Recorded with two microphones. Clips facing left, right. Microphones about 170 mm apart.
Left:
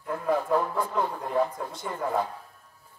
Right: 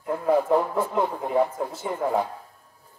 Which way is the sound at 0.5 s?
20° right (ahead or behind).